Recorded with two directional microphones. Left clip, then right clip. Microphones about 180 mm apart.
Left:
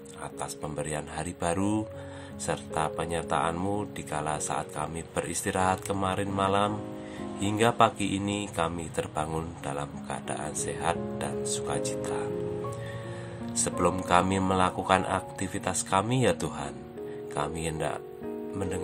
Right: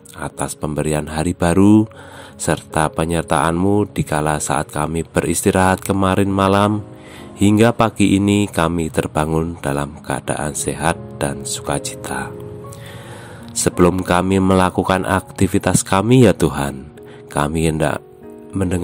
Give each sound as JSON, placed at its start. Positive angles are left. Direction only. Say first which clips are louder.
{"t": 0.2, "sound": "speech", "louder": "right 12 dB", "side_deg": -50}
{"t": 13.7, "sound": "speech", "louder": "right 11 dB", "side_deg": -50}
{"t": 18.6, "sound": "speech", "louder": "right 13 dB", "side_deg": -40}